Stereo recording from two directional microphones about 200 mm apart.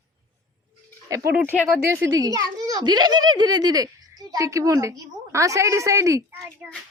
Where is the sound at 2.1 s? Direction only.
15° right (ahead or behind).